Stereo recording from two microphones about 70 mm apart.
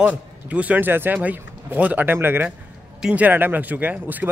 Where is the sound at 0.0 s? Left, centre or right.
Centre.